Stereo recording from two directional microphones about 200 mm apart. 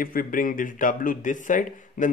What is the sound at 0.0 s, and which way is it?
Speech, 45° left (ahead or behind).